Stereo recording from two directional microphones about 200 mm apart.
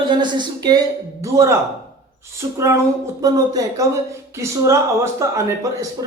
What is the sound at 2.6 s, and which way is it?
Speech, 15° right (ahead or behind).